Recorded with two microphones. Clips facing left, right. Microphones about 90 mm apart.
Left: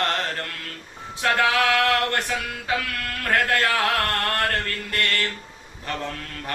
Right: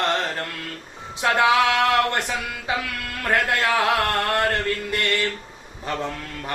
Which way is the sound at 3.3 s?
20° right (ahead or behind).